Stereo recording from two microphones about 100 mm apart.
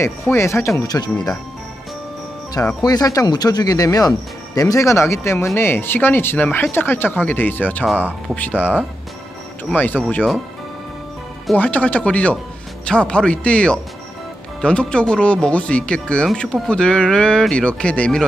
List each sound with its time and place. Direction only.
0.0 s speech: 25° left (ahead or behind)
0.8 s speech: 40° left (ahead or behind)
2.8 s speech: 40° left (ahead or behind); by 7.8 s 20° left (ahead or behind)
7.8 s speech: 10° right (ahead or behind)
8.4 s speech: 15° left (ahead or behind)
11.5 s speech: 15° left (ahead or behind)